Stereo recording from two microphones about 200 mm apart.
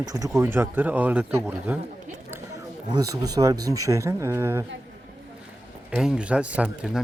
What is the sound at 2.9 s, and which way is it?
Speech, 20° right (ahead or behind).